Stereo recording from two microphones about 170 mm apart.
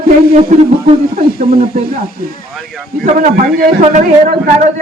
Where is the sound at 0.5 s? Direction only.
45° right (ahead or behind).